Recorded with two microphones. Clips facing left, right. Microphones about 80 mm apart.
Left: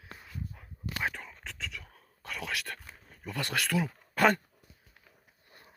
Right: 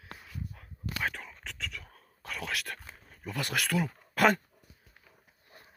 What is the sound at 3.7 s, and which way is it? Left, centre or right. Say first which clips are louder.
Speech: even; centre.